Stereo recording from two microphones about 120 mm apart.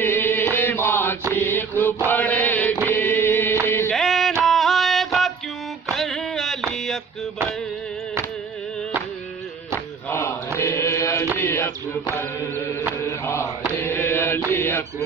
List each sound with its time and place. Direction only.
0.0 s chant: 20° left (ahead or behind)
1.3 s mantra: 20° left (ahead or behind)
2.0 s chant: 15° left (ahead or behind)
2.9 s music: 20° left (ahead or behind)
3.9 s a sound: centre (ahead or behind)
10.6 s chant: 25° left (ahead or behind)
11.3 s a sound: 15° left (ahead or behind)
13.0 s mantra: 20° left (ahead or behind)
13.7 s chant: 20° left (ahead or behind)